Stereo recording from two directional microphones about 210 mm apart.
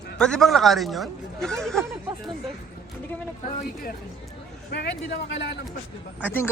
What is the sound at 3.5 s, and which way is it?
Speech, 40° left (ahead or behind).